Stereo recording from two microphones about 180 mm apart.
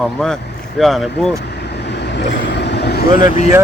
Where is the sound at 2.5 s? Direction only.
70° left (ahead or behind).